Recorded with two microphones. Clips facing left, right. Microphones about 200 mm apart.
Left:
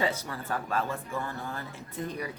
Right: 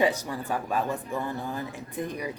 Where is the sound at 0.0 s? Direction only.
15° right (ahead or behind).